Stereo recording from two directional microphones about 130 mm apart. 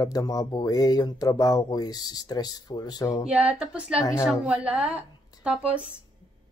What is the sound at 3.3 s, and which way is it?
A woman's voice, 10° right (ahead or behind).